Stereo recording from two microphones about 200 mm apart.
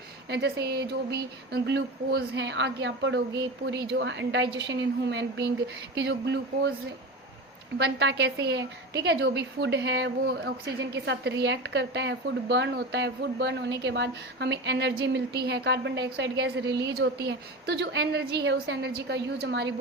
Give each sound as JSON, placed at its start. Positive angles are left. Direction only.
{"t": 0.3, "sound": "a woman's voice", "side_deg": -55}
{"t": 7.8, "sound": "a woman's voice", "side_deg": -60}